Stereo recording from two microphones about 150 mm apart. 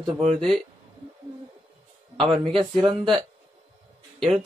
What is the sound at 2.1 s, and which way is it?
Speech, 35° right (ahead or behind).